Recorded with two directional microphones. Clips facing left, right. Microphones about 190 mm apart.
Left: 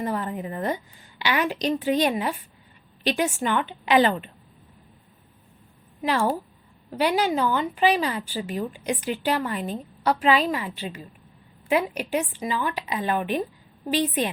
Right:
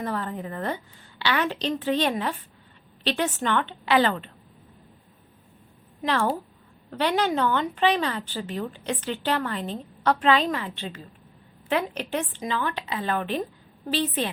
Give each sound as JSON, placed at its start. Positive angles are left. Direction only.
{"t": 0.0, "sound": "speech", "side_deg": 15}
{"t": 6.0, "sound": "speech", "side_deg": 10}